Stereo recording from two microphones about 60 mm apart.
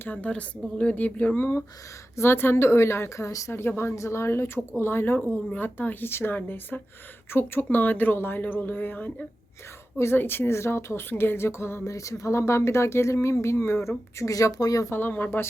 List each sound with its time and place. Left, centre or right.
0.0 s speech: left
1.4 s a woman's voice: left
3.5 s a woman's voice: left
10.2 s a woman's voice: left
11.9 s speech: left
14.8 s a woman's voice: left